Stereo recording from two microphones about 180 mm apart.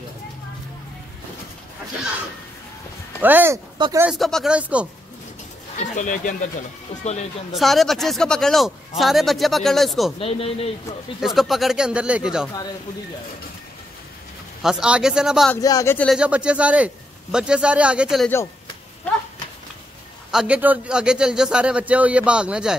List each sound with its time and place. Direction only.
3.2 s speech: 10° right (ahead or behind)
3.7 s speech: 25° right (ahead or behind)
4.0 s speech: centre (ahead or behind)
5.8 s speech: 45° left (ahead or behind)
7.5 s speech: centre (ahead or behind)
10.1 s speech: 35° left (ahead or behind)
11.1 s speech: centre (ahead or behind)
14.6 s speech: 5° right (ahead or behind)
15.5 s speech: 20° left (ahead or behind)
16.1 s speech: 5° right (ahead or behind)
20.2 s speech: 5° right (ahead or behind)